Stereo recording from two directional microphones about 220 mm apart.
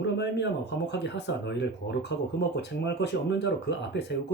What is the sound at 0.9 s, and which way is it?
Speech, 50° left (ahead or behind).